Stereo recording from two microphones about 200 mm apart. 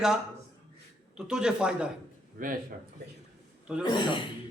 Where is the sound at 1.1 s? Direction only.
5° right (ahead or behind).